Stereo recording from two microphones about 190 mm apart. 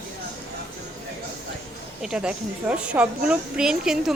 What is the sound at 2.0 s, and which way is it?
Speech, 5° right (ahead or behind).